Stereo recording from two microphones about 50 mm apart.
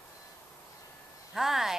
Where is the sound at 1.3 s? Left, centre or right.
Centre.